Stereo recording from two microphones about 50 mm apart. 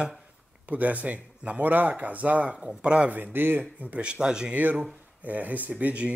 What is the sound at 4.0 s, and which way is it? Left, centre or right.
Speech, centre.